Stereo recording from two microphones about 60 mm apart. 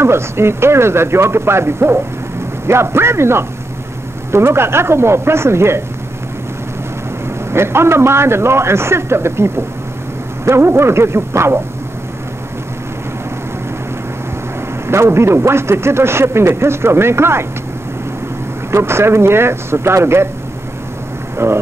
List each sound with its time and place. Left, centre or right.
0.0 s a man's voice: right
7.5 s a man's voice: right
14.9 s a man's voice: right
18.7 s a man's voice: right
21.4 s a man's voice: right